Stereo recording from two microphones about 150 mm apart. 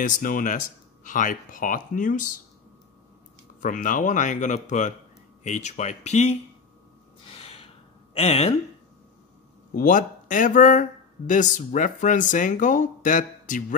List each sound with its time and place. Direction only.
0.0 s speech: 65° left (ahead or behind)
3.6 s speech: 60° left (ahead or behind)
7.2 s a sound: 40° left (ahead or behind)
9.8 s speech: 60° left (ahead or behind)